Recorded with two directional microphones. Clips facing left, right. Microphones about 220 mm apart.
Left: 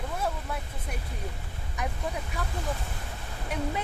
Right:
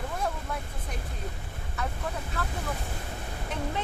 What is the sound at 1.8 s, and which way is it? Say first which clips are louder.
Speech: left 1 dB; 15° left (ahead or behind).